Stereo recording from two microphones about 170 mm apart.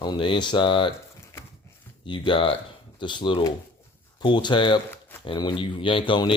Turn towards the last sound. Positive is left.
turn(degrees=30)  # may be behind; listen again after turning